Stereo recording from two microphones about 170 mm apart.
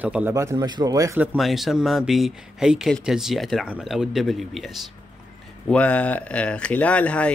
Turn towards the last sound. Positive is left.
turn(degrees=10)  # may be behind; listen again after turning